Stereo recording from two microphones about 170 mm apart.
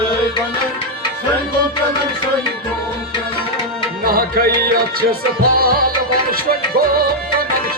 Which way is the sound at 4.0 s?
60° right (ahead or behind).